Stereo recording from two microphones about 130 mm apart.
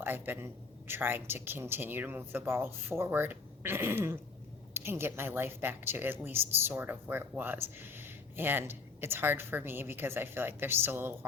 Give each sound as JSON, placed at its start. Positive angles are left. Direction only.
{"t": 0.0, "sound": "a woman's voice", "side_deg": -15}